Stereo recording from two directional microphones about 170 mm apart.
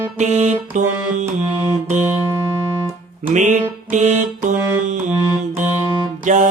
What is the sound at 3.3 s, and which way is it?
Music, 45° right (ahead or behind).